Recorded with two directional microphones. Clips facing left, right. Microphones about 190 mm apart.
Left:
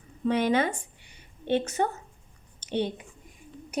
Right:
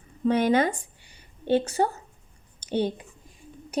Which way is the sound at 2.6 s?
40° right (ahead or behind).